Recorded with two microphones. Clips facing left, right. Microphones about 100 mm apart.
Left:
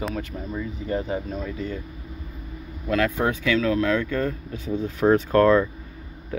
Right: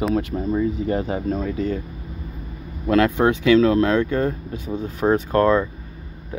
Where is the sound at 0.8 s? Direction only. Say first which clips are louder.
Right 4 dB; 65° right (ahead or behind).